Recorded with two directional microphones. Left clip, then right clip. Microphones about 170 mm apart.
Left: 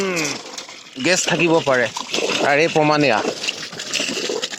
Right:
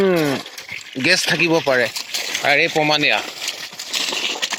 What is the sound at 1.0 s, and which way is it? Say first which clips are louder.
Speech: right 1 dB; 10° right (ahead or behind).